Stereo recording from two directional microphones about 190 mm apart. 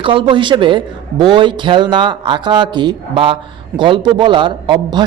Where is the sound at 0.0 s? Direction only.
25° right (ahead or behind).